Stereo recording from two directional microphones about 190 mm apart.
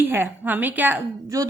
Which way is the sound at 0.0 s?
10° right (ahead or behind).